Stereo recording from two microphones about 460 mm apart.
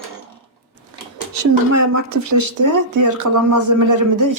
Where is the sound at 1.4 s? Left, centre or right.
Right.